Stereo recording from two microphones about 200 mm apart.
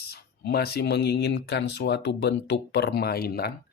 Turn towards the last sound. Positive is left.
turn(degrees=50)  # may be behind; listen again after turning